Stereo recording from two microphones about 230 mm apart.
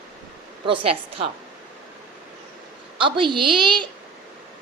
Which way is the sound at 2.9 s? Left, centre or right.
Right.